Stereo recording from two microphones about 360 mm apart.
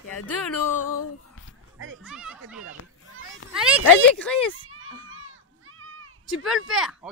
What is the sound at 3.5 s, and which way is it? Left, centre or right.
Speech, centre.